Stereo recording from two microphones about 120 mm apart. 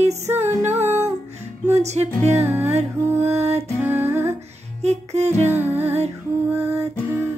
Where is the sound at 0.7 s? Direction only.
65° right (ahead or behind).